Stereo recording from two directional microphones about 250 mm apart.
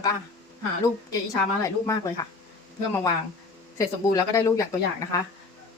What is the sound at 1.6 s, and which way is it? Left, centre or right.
Speech, centre.